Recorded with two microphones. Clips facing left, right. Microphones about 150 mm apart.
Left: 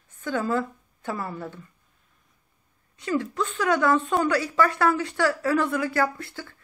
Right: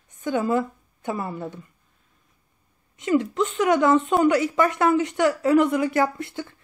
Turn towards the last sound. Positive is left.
turn(degrees=-20)  # may be behind; listen again after turning